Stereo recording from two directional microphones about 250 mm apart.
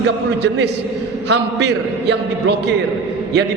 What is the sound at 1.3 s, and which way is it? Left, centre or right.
A man's voice, right.